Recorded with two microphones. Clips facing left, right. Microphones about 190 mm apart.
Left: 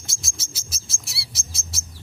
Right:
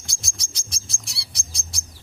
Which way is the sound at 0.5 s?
5° left (ahead or behind).